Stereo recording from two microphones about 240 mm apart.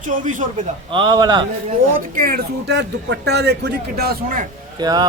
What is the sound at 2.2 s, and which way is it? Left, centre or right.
Speech, right.